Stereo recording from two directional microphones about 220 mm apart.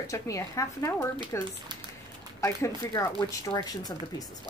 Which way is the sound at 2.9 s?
15° left (ahead or behind).